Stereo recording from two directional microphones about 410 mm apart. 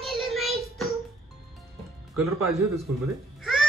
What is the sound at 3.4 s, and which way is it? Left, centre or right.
Music, centre.